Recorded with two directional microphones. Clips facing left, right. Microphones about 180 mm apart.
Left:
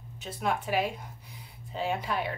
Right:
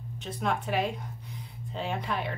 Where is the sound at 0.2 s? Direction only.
5° left (ahead or behind).